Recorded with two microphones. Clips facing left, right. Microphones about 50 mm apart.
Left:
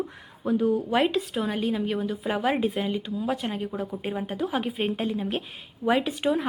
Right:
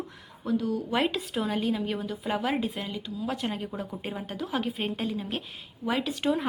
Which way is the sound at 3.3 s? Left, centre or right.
Centre.